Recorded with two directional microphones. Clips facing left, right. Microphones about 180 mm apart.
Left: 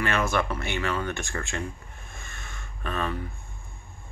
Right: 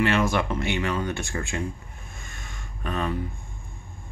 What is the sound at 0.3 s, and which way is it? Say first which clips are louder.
Speech: right 2 dB; 20° right (ahead or behind).